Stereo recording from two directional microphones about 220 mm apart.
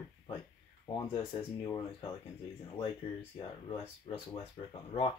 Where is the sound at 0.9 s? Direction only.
20° left (ahead or behind).